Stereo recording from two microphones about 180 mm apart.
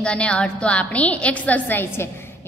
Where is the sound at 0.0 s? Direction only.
5° left (ahead or behind).